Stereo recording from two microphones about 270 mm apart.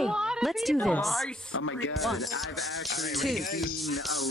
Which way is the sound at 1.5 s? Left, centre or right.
Left.